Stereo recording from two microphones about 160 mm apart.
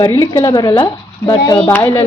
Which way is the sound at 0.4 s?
15° left (ahead or behind).